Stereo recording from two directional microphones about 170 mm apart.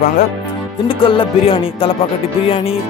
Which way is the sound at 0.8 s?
30° left (ahead or behind).